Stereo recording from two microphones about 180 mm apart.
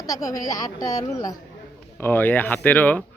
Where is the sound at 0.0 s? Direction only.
20° left (ahead or behind).